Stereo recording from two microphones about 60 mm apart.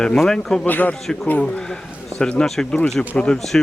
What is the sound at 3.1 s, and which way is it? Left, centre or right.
Speech, centre.